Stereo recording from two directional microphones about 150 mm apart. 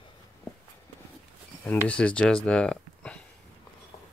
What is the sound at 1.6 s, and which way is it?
Speech, 10° left (ahead or behind).